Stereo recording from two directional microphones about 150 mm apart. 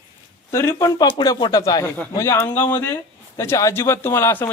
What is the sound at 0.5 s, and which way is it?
A man's voice, 20° left (ahead or behind).